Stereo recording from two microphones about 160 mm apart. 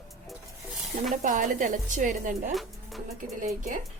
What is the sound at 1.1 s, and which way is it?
Speech, 55° right (ahead or behind).